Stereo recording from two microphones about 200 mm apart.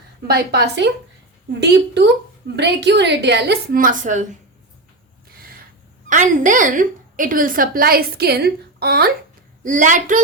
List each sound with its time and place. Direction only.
0.3 s a woman's voice: 55° right (ahead or behind); by 4.3 s 40° right (ahead or behind)
6.1 s a woman's voice: 40° right (ahead or behind)
9.6 s a woman's voice: 40° right (ahead or behind)